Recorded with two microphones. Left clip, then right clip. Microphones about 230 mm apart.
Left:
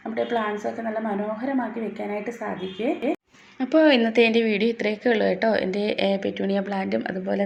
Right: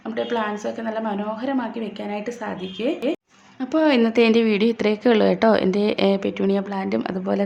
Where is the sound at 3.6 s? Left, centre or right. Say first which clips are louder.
Left 1 dB; centre.